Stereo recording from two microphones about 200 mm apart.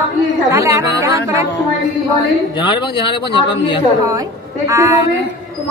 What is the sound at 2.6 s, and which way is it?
A man's voice, 25° left (ahead or behind).